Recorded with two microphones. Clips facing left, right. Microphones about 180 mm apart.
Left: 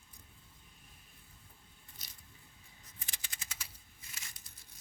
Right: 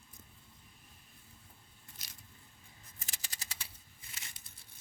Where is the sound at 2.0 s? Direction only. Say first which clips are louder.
Right 2 dB; 90° right.